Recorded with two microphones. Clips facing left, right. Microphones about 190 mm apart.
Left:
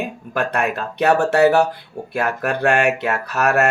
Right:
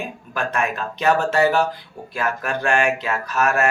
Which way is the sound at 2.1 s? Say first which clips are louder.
Left 3 dB; 60° left (ahead or behind).